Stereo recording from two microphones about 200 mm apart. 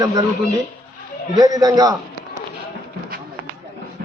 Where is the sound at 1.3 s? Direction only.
20° right (ahead or behind).